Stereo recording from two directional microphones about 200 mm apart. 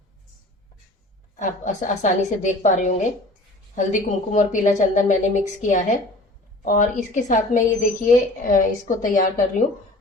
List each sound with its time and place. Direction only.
1.4 s a woman's voice: 35° left (ahead or behind)